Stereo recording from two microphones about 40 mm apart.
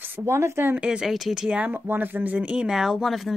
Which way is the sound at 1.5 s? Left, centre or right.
Right.